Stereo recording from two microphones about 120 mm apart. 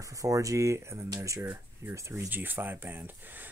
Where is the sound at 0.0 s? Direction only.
30° right (ahead or behind).